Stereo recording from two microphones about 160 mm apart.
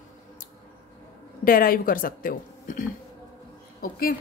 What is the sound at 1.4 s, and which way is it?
A woman's voice, 65° left (ahead or behind).